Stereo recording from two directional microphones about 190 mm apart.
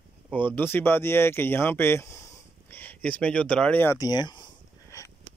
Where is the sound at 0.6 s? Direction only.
10° left (ahead or behind).